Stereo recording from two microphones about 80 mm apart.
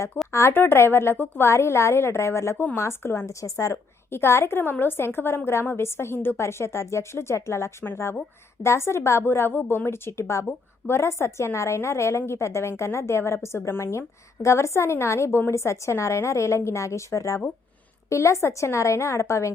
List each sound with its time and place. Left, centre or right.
0.3 s a woman's voice: left